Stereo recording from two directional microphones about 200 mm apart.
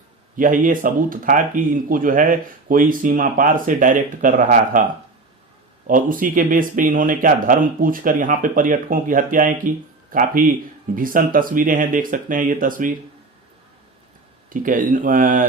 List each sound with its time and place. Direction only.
0.3 s speech: 40° right (ahead or behind)
5.9 s speech: 45° right (ahead or behind)
14.5 s speech: 45° right (ahead or behind)